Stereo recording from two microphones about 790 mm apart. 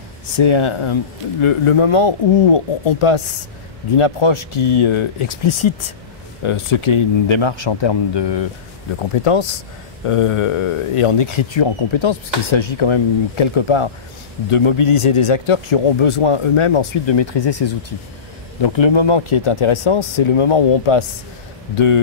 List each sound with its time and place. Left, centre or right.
0.4 s speech: left